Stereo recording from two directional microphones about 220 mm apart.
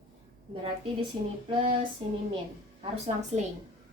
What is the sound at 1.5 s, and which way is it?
Speech, 25° right (ahead or behind).